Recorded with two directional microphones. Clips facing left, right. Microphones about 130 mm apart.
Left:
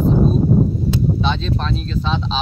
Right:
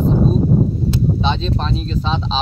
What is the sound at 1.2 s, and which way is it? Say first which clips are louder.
Speech: right 1 dB; centre (ahead or behind).